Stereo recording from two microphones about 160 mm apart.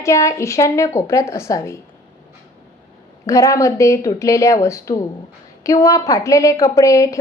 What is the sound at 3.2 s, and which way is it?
A woman's voice, 20° left (ahead or behind).